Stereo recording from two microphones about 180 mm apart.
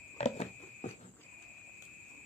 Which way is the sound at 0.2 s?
35° left (ahead or behind).